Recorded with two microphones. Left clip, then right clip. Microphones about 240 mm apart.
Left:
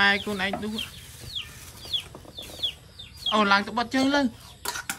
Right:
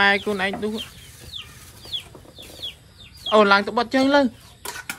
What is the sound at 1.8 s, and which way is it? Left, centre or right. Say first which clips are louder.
Bird flight: left 1 dB; centre.